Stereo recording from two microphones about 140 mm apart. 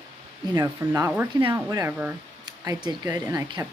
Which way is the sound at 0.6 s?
25° right (ahead or behind).